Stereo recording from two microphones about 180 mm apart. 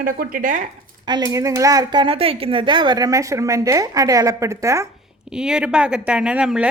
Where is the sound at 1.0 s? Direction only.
25° right (ahead or behind).